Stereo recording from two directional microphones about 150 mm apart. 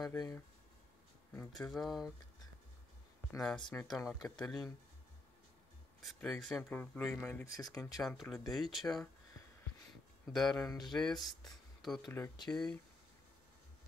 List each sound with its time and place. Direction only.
0.1 s speech: 20° left (ahead or behind)
1.6 s speech: centre (ahead or behind)
3.3 s speech: 5° left (ahead or behind)
6.0 s speech: centre (ahead or behind)
7.4 s speech: 20° left (ahead or behind)
8.0 s speech: centre (ahead or behind)
10.2 s speech: centre (ahead or behind)
12.4 s speech: 5° left (ahead or behind)